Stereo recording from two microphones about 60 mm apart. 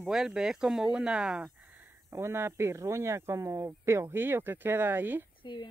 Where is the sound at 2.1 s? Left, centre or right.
Right.